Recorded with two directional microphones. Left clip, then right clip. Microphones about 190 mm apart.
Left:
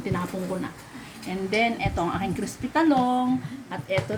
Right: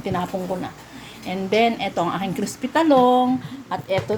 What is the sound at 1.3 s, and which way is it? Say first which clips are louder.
A woman's voice: right 5 dB; 35° right (ahead or behind).